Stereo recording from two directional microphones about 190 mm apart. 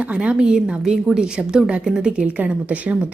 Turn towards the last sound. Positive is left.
turn(degrees=-5)  # may be behind; listen again after turning